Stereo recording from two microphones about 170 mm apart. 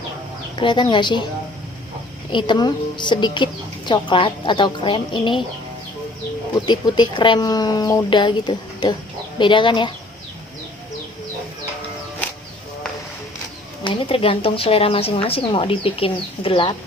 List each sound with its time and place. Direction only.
0.5 s a woman's voice: 30° left (ahead or behind)
2.3 s a woman's voice: 25° left (ahead or behind)
6.7 s a woman's voice: 25° left (ahead or behind)
13.8 s a woman's voice: 30° left (ahead or behind)